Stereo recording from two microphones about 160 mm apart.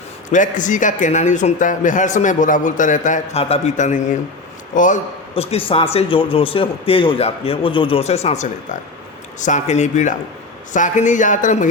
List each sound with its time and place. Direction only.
0.3 s a man's voice: 50° left (ahead or behind)
5.3 s a man's voice: 35° left (ahead or behind)